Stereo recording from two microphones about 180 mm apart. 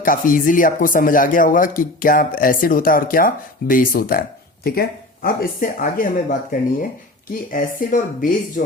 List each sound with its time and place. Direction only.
0.0 s speech: 50° left (ahead or behind)